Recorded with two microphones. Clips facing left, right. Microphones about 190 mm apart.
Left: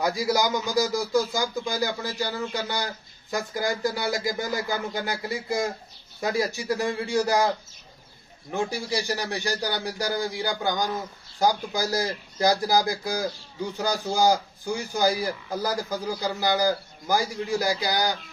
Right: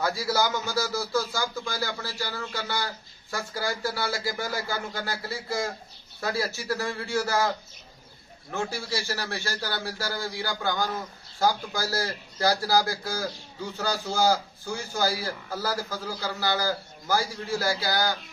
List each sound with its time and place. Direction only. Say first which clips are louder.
0.0 s speech: left 2 dB; 15° left (ahead or behind)